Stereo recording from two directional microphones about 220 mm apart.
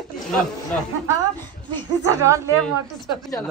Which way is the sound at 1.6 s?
15° right (ahead or behind).